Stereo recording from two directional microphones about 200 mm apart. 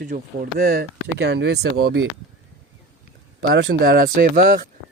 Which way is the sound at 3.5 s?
55° right (ahead or behind).